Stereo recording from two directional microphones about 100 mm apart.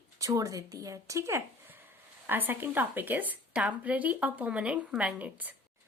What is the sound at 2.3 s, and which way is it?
A woman's voice, 20° right (ahead or behind).